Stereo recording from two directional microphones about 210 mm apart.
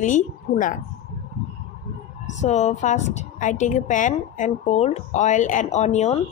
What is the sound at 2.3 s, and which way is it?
A woman's voice, 35° left (ahead or behind).